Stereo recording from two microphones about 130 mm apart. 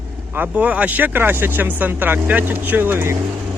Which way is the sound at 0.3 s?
10° right (ahead or behind).